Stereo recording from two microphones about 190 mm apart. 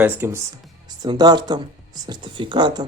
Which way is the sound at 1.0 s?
20° right (ahead or behind).